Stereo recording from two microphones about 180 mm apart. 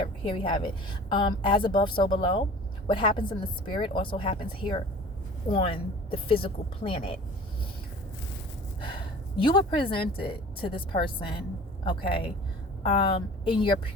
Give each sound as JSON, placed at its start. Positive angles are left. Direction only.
{"t": 0.0, "sound": "a woman's voice", "side_deg": 25}
{"t": 9.4, "sound": "speech", "side_deg": 25}